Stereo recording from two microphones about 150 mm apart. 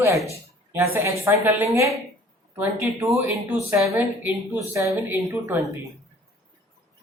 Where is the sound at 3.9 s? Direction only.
15° right (ahead or behind).